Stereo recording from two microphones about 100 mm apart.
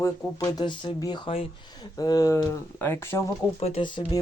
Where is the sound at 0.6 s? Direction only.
55° left (ahead or behind); by 2.4 s 35° left (ahead or behind).